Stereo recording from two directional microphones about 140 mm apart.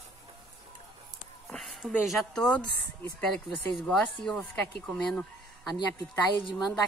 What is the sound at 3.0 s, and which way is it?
Speech, 5° left (ahead or behind).